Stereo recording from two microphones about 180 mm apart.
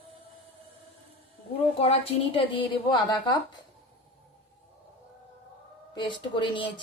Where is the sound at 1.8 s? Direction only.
30° left (ahead or behind).